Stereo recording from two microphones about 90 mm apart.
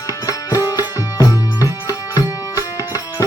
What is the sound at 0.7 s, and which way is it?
Music, 40° left (ahead or behind).